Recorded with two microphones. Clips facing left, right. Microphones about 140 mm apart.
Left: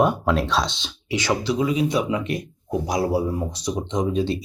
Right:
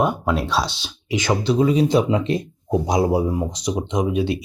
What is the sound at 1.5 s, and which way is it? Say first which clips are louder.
Speech: right 6 dB; 30° right (ahead or behind).